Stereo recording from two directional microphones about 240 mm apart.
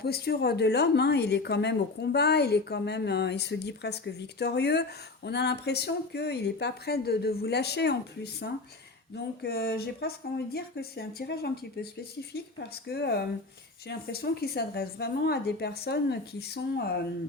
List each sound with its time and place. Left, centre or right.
0.0 s a woman's voice: left